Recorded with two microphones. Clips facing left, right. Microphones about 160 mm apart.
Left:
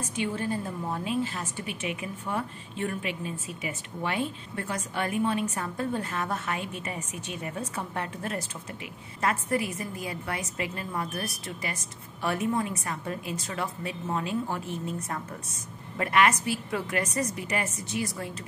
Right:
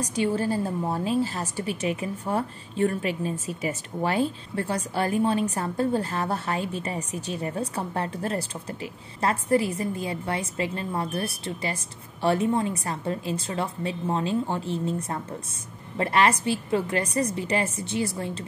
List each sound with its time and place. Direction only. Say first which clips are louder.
0.0 s a woman's voice: right 6 dB; 35° right (ahead or behind)